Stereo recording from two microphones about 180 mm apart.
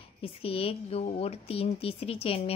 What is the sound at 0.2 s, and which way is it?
A woman's voice, 30° left (ahead or behind).